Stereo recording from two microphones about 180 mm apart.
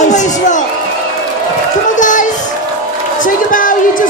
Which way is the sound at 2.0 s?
45° left (ahead or behind).